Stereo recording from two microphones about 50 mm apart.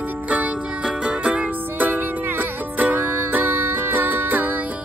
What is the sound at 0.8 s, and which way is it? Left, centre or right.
Music, right.